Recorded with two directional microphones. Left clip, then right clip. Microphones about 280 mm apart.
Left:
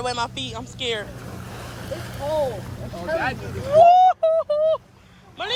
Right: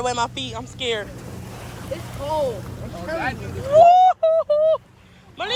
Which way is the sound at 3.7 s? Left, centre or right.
Centre.